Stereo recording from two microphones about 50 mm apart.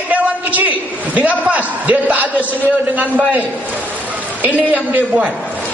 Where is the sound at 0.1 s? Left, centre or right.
Right.